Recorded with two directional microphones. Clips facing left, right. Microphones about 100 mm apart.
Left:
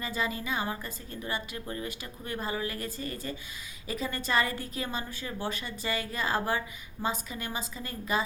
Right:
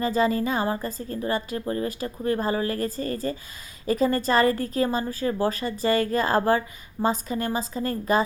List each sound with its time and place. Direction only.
0.0 s a woman's voice: 40° right (ahead or behind)